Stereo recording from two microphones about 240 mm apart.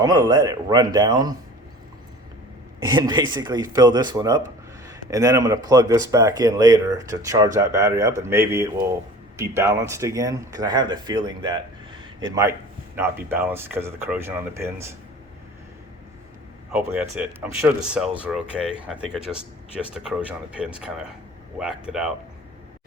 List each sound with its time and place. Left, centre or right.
0.0 s speech: centre
2.8 s speech: centre
16.7 s speech: centre